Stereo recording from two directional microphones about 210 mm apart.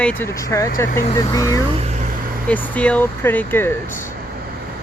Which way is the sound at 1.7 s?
30° right (ahead or behind).